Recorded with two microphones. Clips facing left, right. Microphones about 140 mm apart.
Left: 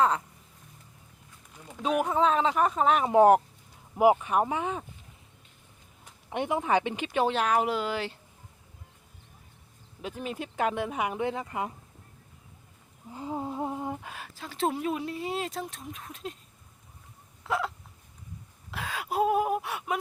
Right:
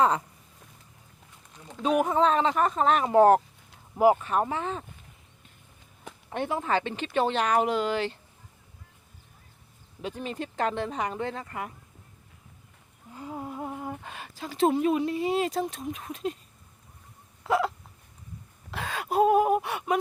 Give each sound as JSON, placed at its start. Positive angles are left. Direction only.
{"t": 1.6, "sound": "speech", "side_deg": 5}
{"t": 6.3, "sound": "speech", "side_deg": 15}
{"t": 10.0, "sound": "speech", "side_deg": 5}
{"t": 13.1, "sound": "humming", "side_deg": 25}
{"t": 14.0, "sound": "speech", "side_deg": 0}
{"t": 17.4, "sound": "hiccup", "side_deg": 0}
{"t": 18.7, "sound": "a sound", "side_deg": 5}